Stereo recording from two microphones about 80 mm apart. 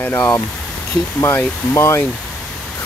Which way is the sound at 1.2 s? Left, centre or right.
Left.